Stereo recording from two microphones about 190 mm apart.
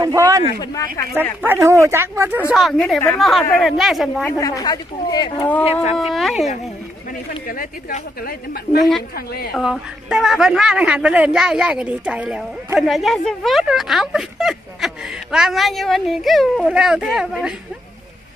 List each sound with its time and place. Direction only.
0.0 s speech: 20° right (ahead or behind)
1.4 s speech: 10° right (ahead or behind)
2.5 s a woman's voice: centre (ahead or behind)
4.3 s speech: 15° left (ahead or behind)
5.6 s speech: 30° left (ahead or behind)
5.9 s a woman's voice: centre (ahead or behind)
7.4 s a woman's voice: 50° left (ahead or behind)
9.5 s a woman's voice: centre (ahead or behind)